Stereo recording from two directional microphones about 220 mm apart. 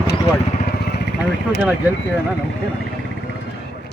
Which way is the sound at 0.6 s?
50° left (ahead or behind).